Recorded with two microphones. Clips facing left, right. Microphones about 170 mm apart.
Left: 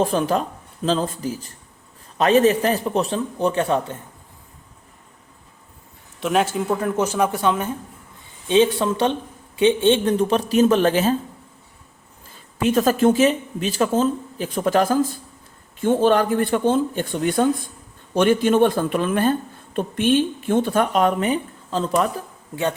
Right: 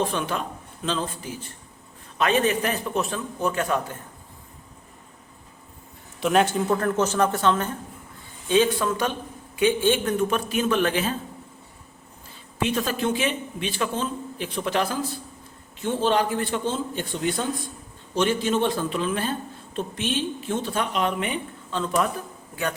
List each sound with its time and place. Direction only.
0.0 s a man's voice: 40° left (ahead or behind)
6.1 s speech: centre (ahead or behind)
8.4 s a man's voice: 25° left (ahead or behind)
12.5 s speech: 45° left (ahead or behind)